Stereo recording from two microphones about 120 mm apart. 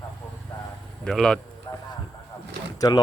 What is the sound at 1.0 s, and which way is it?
Speech, 5° left (ahead or behind).